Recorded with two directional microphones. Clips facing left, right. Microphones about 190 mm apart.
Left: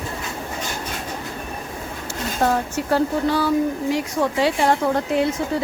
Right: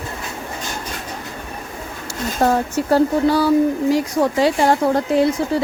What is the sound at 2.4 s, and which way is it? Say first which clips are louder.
A woman's voice: right 4 dB; 40° right (ahead or behind).